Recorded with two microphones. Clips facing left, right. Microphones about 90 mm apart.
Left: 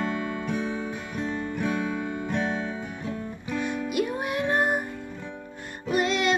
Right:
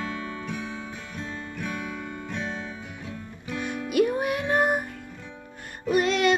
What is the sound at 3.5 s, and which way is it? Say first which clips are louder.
Music: left 2 dB; 20° left (ahead or behind).